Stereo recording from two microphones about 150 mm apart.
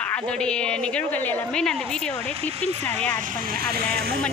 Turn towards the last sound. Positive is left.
turn(degrees=-90)